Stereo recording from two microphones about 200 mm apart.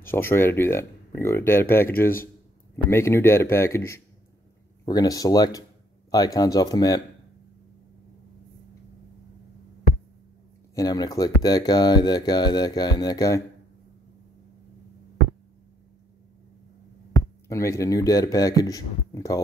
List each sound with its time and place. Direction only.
0.0 s speech: 10° left (ahead or behind)
10.7 s speech: 20° left (ahead or behind)
17.1 s speech: 15° left (ahead or behind)